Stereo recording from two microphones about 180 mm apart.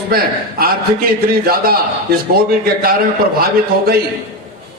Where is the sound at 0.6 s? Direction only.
55° right (ahead or behind).